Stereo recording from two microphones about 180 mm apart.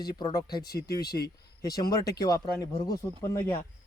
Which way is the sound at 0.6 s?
60° left (ahead or behind).